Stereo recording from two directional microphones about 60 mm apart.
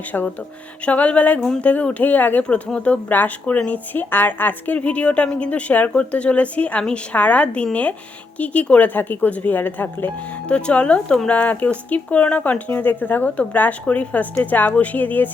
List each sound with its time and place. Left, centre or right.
0.9 s speech: left
10.5 s speech: centre